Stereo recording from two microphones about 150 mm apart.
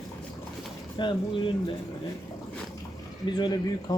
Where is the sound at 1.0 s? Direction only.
30° left (ahead or behind).